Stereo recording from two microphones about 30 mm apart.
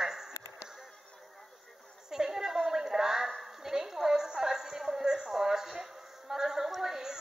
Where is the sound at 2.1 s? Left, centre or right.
Centre.